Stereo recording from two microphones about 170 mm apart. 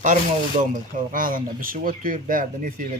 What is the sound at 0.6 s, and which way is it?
Speech, 55° right (ahead or behind).